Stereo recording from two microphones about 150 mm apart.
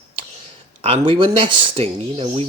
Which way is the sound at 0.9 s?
35° right (ahead or behind).